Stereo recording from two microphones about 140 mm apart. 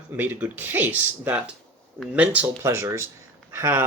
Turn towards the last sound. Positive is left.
turn(degrees=-15)  # may be behind; listen again after turning